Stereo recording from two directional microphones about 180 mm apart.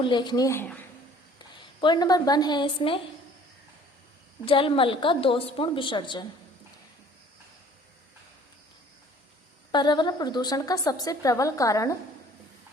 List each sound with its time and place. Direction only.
0.0 s a woman's voice: 25° left (ahead or behind)
1.8 s a woman's voice: 25° left (ahead or behind)
4.4 s a woman's voice: 30° left (ahead or behind)
9.7 s a woman's voice: 25° left (ahead or behind)